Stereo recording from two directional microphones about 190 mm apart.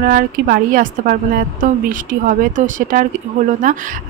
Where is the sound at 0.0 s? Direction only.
50° right (ahead or behind).